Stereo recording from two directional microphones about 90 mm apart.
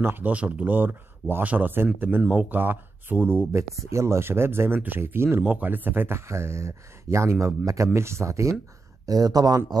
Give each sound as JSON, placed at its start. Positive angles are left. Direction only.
{"t": 0.0, "sound": "speech", "side_deg": -20}